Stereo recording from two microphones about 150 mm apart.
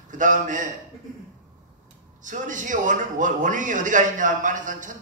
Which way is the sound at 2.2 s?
60° right (ahead or behind).